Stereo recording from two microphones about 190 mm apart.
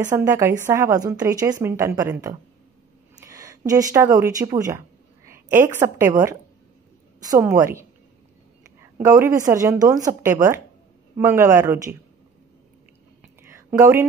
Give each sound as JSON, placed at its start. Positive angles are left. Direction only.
{"t": 0.1, "sound": "speech", "side_deg": -15}
{"t": 8.9, "sound": "speech", "side_deg": -15}
{"t": 13.4, "sound": "a sound", "side_deg": -15}